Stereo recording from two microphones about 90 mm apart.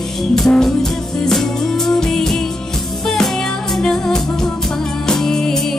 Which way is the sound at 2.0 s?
5° left (ahead or behind).